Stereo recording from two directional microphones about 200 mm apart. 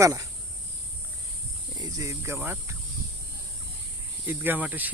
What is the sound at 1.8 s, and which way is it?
Speech, 15° right (ahead or behind).